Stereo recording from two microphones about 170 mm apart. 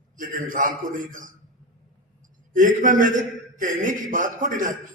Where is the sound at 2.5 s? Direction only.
50° right (ahead or behind).